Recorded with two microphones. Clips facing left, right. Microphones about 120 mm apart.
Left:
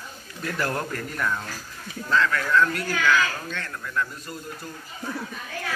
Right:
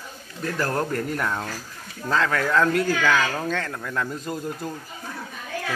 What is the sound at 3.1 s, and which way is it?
Speech, 90° right.